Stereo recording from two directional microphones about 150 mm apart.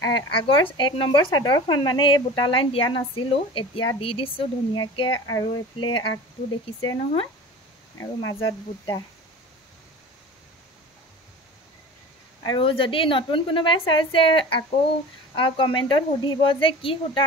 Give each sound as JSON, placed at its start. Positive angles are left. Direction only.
{"t": 0.0, "sound": "speech", "side_deg": 35}
{"t": 12.4, "sound": "speech", "side_deg": 35}